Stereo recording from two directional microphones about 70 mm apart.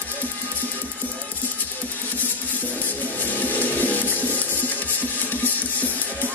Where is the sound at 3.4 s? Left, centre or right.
Left.